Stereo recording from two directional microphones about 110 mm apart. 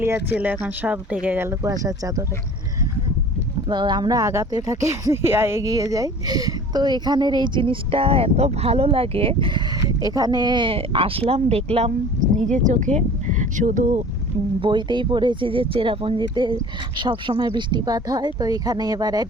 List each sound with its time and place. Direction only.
0.0 s speech: 20° right (ahead or behind)
3.7 s speech: 40° right (ahead or behind); by 9.5 s 60° right (ahead or behind)
9.6 s speech: 35° right (ahead or behind); by 11.9 s 70° right (ahead or behind)
12.5 s speech: 90° right
14.6 s speech: 45° right (ahead or behind)